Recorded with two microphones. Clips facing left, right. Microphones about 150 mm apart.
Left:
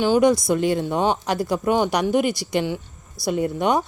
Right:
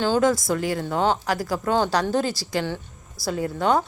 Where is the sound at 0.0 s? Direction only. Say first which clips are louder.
Left 3 dB; 15° left (ahead or behind).